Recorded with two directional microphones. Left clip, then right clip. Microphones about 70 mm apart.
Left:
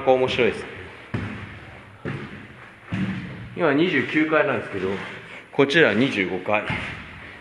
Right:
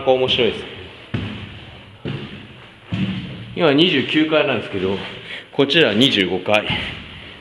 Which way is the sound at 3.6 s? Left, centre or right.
Right.